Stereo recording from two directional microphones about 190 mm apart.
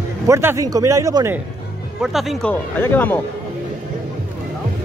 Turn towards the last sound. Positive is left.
turn(degrees=10)  # may be behind; listen again after turning